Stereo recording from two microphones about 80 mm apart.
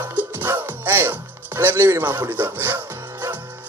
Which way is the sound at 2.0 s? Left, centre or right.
Right.